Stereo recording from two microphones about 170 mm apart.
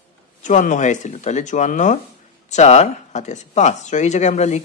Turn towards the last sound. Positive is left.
turn(degrees=45)  # may be behind; listen again after turning